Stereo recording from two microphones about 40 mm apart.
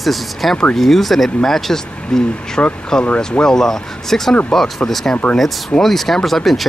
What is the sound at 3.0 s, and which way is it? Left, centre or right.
Speech, left.